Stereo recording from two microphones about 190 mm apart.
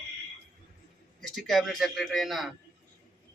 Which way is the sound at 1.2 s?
Centre (ahead or behind).